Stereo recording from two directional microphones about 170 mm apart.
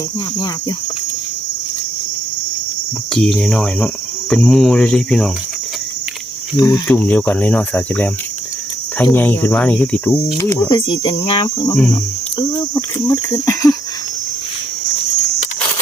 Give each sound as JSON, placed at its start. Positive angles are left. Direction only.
{"t": 3.2, "sound": "cricket", "side_deg": 0}
{"t": 6.6, "sound": "cricket", "side_deg": 20}
{"t": 9.1, "sound": "cricket", "side_deg": 10}
{"t": 10.3, "sound": "speech", "side_deg": 20}
{"t": 11.7, "sound": "cricket", "side_deg": 5}
{"t": 13.1, "sound": "cricket", "side_deg": 15}